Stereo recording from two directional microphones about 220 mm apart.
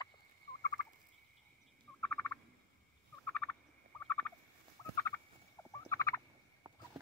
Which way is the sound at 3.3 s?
10° left (ahead or behind).